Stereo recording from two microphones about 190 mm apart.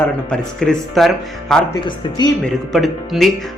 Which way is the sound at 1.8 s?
20° left (ahead or behind).